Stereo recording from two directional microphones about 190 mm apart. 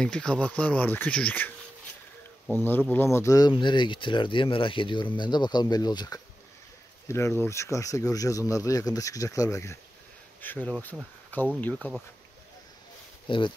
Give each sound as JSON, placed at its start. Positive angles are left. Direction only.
{"t": 0.0, "sound": "speech", "side_deg": 5}
{"t": 11.7, "sound": "speech", "side_deg": 0}
{"t": 13.3, "sound": "speech", "side_deg": 25}